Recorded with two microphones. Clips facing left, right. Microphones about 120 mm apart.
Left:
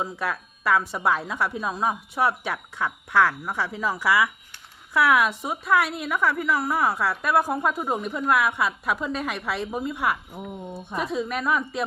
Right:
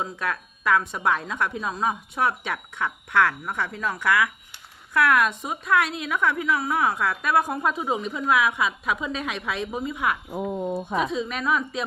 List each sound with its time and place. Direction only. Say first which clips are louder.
0.0 s a woman's voice: even; 5° left (ahead or behind)
10.8 s a woman's voice: right 4 dB; 75° right (ahead or behind)
11.3 s a woman's voice: even; 5° left (ahead or behind)